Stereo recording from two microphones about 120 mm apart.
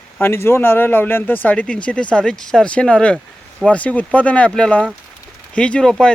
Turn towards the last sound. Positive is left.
turn(degrees=5)  # may be behind; listen again after turning